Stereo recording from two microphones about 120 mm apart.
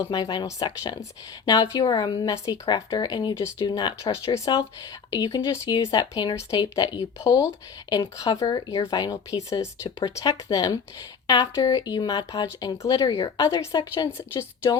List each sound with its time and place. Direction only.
0.0 s speech: 35° left (ahead or behind)
13.7 s speech: 40° left (ahead or behind)
14.2 s speech: 20° left (ahead or behind)